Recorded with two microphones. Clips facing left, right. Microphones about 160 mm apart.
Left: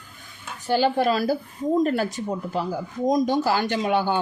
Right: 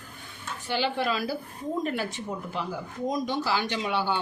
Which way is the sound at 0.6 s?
45° left (ahead or behind).